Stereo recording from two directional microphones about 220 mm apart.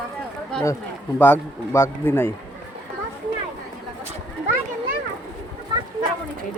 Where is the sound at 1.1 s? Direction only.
10° left (ahead or behind).